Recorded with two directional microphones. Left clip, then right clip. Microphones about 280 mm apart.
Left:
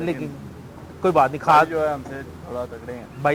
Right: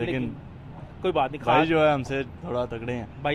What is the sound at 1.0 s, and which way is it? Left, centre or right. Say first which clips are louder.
Speech: left 7 dB; centre.